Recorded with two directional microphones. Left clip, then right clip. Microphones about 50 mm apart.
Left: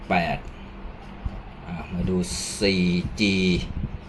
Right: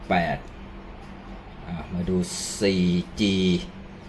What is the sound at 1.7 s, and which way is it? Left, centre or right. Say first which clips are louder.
Speech: even; centre.